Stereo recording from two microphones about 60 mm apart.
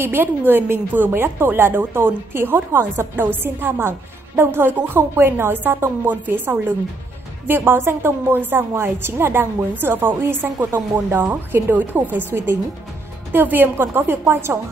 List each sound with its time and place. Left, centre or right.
0.0 s a woman's voice: right